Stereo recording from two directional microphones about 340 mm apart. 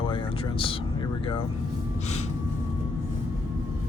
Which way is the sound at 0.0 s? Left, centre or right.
Centre.